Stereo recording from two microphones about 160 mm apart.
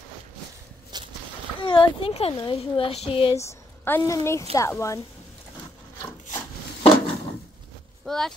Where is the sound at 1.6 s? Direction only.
30° left (ahead or behind).